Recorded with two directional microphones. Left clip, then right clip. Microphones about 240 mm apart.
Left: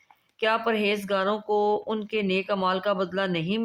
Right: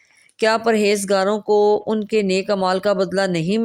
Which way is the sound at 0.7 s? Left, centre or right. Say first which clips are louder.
Right 8 dB; right.